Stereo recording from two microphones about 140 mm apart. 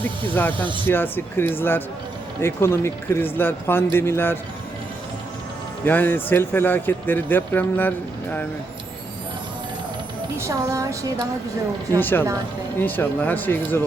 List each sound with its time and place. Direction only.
0.5 s speech: 35° right (ahead or behind)
0.9 s speech: 15° left (ahead or behind)
5.8 s speech: 15° left (ahead or behind)
10.3 s a woman's voice: 20° right (ahead or behind)
11.9 s speech: 15° left (ahead or behind)